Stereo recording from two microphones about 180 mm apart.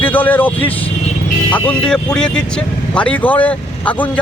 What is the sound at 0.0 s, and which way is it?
Speech, 10° left (ahead or behind).